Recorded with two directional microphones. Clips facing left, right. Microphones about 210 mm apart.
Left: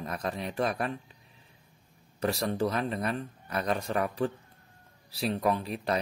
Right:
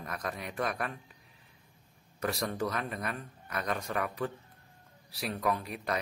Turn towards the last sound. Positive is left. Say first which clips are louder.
# left 4 dB
turn(degrees=30)  # may be behind; listen again after turning